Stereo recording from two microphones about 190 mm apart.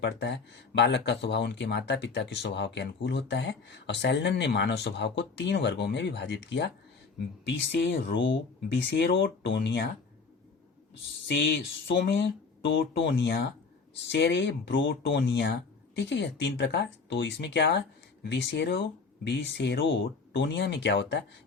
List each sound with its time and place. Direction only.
0.0 s speech: 65° left (ahead or behind)
11.9 s speech: 70° left (ahead or behind)